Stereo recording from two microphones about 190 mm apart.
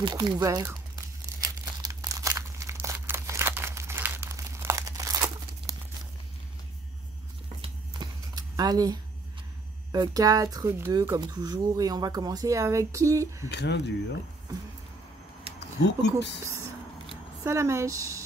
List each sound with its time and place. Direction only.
0.0 s crumpling: 20° right (ahead or behind)
7.6 s a sound: 25° right (ahead or behind)
9.9 s speech: 20° right (ahead or behind)
13.5 s speech: 65° left (ahead or behind)
15.8 s speech: 65° left (ahead or behind)
17.4 s speech: 15° right (ahead or behind)